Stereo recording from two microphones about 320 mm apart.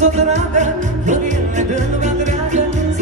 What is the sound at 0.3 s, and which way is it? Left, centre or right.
Music, right.